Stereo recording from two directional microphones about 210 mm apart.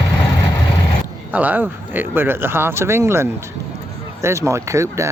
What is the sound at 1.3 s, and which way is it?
Speech, 10° right (ahead or behind).